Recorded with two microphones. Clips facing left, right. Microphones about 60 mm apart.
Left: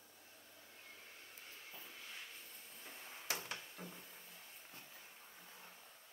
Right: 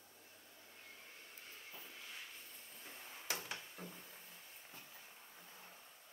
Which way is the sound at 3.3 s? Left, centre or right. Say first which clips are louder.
Even; centre.